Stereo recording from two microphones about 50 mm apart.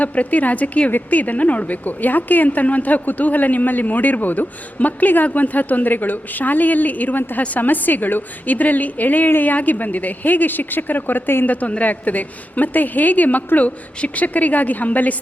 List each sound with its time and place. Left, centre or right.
0.0 s speech: left
11.4 s speech: left